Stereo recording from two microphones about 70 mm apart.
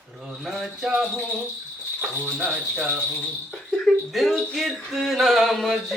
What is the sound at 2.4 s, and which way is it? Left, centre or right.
Speech, centre.